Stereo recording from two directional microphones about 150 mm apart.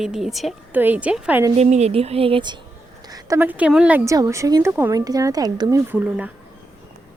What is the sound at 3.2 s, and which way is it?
Speech, 15° right (ahead or behind).